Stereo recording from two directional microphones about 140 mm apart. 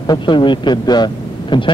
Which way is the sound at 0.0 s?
30° left (ahead or behind).